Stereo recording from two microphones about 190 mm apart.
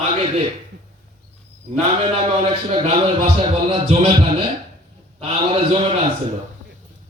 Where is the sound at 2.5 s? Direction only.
30° right (ahead or behind).